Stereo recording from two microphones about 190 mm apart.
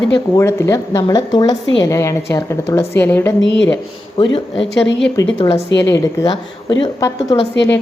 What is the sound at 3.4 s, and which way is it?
Speech, 70° left (ahead or behind).